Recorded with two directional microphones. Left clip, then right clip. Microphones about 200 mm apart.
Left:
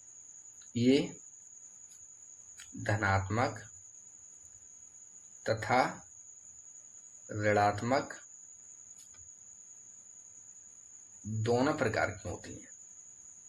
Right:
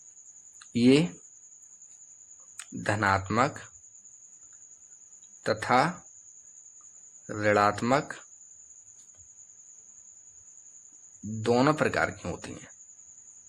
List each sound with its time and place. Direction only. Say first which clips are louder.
0.7 s speech: right 6 dB; 45° right (ahead or behind)
2.6 s speech: right 5 dB; 50° right (ahead or behind)
5.4 s speech: right 5 dB; 50° right (ahead or behind)
7.3 s speech: right 5 dB; 50° right (ahead or behind)
11.4 s speech: right 6 dB; 50° right (ahead or behind)